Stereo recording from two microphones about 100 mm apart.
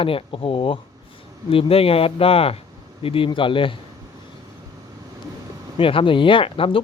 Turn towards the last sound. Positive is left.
turn(degrees=65)  # may be behind; listen again after turning